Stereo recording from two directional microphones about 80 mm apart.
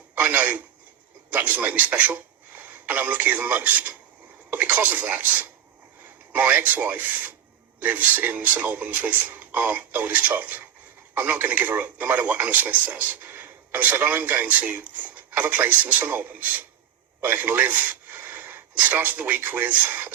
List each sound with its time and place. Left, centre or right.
0.2 s a man's voice: centre